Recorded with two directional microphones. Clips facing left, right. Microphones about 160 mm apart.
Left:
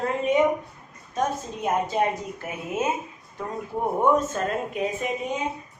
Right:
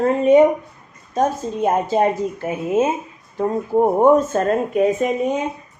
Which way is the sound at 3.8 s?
45° right (ahead or behind).